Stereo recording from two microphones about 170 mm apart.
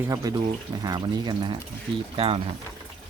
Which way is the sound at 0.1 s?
20° right (ahead or behind).